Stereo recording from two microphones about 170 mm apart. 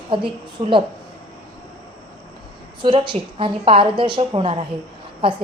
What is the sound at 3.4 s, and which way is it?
A woman's voice, 30° right (ahead or behind).